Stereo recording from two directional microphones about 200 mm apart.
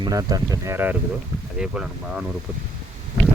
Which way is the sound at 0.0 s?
20° right (ahead or behind).